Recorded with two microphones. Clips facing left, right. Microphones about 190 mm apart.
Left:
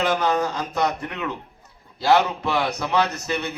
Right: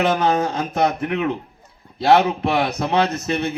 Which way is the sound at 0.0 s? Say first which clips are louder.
Right 3 dB; 55° right (ahead or behind).